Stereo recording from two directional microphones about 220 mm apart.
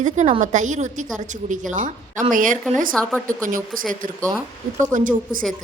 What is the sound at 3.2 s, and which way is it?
Speech, 35° right (ahead or behind).